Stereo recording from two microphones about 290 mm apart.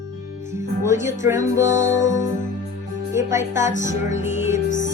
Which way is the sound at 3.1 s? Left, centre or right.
Centre.